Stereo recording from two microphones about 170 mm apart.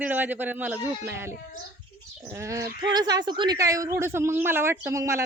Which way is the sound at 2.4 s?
20° right (ahead or behind).